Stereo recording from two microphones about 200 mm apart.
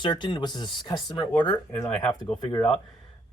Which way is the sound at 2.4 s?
25° left (ahead or behind).